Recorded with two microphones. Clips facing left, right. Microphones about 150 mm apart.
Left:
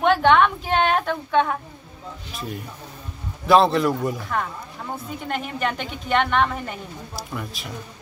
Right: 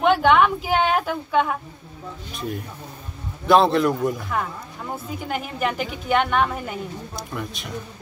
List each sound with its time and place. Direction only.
0.0 s a woman's voice: 5° right (ahead or behind)